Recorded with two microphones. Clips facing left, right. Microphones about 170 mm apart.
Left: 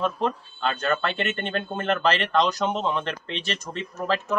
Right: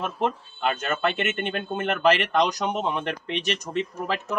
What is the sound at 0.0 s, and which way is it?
Speech, 15° right (ahead or behind).